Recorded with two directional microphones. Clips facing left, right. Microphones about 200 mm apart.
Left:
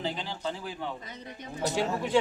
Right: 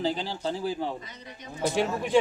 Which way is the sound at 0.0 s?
35° right (ahead or behind).